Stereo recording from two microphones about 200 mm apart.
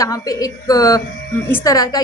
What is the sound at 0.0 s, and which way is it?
A woman's voice, 15° left (ahead or behind).